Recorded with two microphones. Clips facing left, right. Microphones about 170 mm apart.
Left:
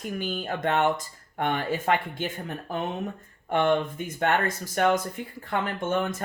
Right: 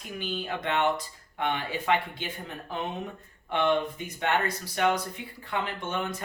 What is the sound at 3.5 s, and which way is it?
Speech, 45° left (ahead or behind).